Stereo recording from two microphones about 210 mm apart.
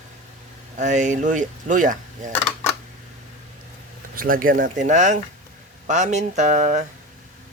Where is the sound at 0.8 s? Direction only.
35° right (ahead or behind).